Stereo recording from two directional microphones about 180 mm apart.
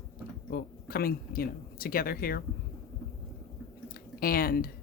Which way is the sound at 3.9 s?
55° left (ahead or behind).